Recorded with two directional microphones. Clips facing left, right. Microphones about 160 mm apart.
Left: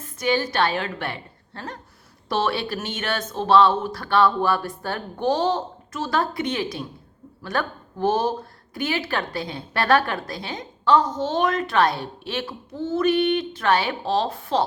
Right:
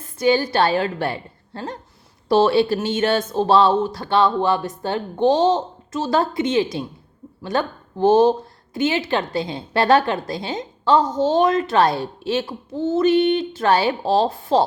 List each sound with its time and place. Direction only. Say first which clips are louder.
0.2 s a woman's voice: right 5 dB; 30° right (ahead or behind)